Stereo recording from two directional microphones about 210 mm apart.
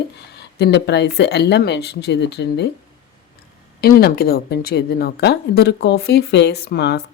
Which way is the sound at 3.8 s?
45° left (ahead or behind).